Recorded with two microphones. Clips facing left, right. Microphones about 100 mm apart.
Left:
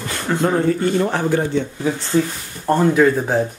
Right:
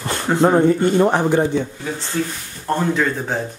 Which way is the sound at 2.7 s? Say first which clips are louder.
Left 5 dB; 5° left (ahead or behind).